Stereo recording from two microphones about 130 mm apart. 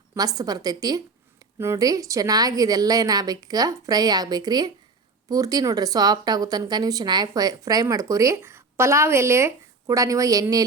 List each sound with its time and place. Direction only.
0.1 s a woman's voice: 30° right (ahead or behind)